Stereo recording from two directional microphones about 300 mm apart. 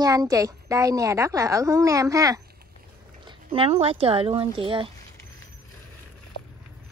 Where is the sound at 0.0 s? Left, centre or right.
Centre.